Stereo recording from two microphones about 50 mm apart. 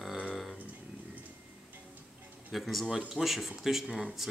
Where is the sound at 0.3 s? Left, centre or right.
Centre.